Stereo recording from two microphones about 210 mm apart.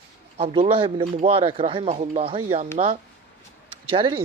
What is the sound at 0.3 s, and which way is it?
Speech, 30° right (ahead or behind).